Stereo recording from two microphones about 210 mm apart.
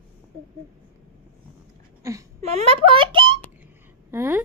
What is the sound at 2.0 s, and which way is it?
Speech, 15° right (ahead or behind).